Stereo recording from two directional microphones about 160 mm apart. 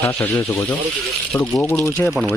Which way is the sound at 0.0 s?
10° left (ahead or behind).